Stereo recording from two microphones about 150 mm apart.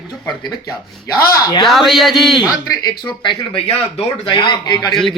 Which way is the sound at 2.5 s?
25° left (ahead or behind).